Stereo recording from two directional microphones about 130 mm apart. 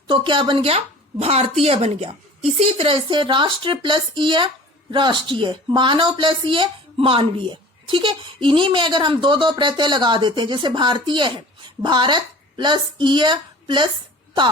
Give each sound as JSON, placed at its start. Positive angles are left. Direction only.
{"t": 0.1, "sound": "a woman's voice", "side_deg": -40}